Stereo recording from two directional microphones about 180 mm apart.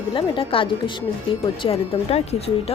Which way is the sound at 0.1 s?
30° left (ahead or behind).